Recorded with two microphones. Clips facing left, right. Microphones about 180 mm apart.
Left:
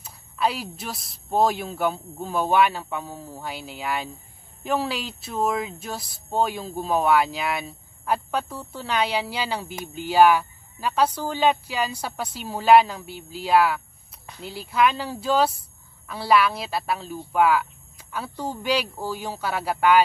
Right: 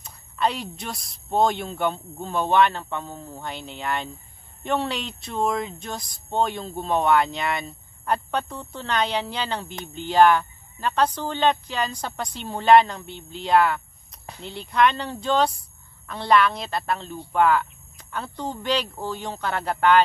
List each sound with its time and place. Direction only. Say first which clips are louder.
0.0 s a woman's voice: even; 5° left (ahead or behind)